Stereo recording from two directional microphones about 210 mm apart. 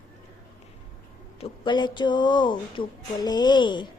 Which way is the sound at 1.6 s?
20° left (ahead or behind).